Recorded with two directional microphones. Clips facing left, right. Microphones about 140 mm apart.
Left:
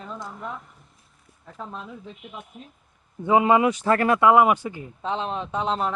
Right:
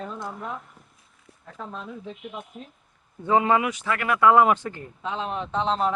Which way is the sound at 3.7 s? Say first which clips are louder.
Left 6 dB; 40° left (ahead or behind).